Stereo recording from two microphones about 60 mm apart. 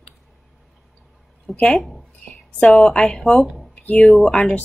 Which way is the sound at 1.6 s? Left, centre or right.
Centre.